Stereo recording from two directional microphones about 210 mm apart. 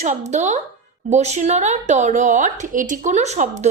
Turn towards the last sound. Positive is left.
turn(degrees=-35)  # may be behind; listen again after turning